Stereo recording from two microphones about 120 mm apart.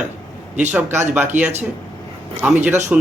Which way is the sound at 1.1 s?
15° right (ahead or behind).